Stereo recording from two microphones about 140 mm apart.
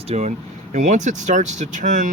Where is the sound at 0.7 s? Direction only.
60° right (ahead or behind).